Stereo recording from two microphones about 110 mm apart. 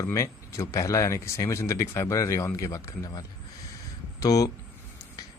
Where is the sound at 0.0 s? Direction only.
30° left (ahead or behind).